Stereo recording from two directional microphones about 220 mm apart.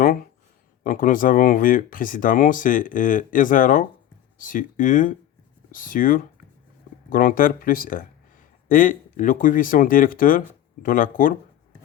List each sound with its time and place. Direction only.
0.9 s speech: 40° left (ahead or behind)